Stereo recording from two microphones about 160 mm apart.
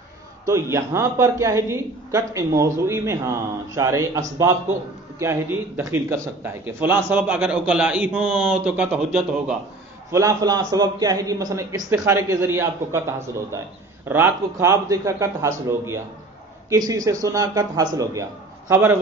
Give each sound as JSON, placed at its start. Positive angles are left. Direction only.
{"t": 0.5, "sound": "a man's voice", "side_deg": -15}
{"t": 5.2, "sound": "a man's voice", "side_deg": -15}
{"t": 10.1, "sound": "a man's voice", "side_deg": -20}